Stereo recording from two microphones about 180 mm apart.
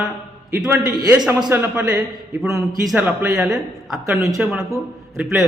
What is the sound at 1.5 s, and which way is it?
A man's voice, 10° right (ahead or behind).